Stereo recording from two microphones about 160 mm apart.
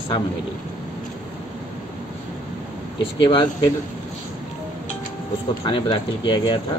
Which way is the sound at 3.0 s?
30° left (ahead or behind).